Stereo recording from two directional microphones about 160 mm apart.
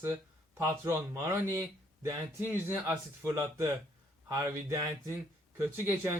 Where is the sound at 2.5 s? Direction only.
10° right (ahead or behind).